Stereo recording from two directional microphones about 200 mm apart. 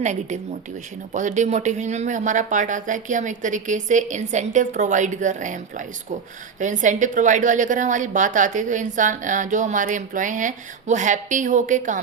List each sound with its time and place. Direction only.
0.0 s a woman's voice: 35° right (ahead or behind)